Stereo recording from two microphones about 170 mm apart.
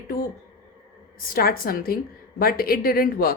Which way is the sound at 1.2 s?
60° left (ahead or behind).